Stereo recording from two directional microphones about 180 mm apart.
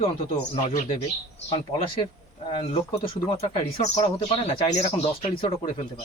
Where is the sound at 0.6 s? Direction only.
45° left (ahead or behind).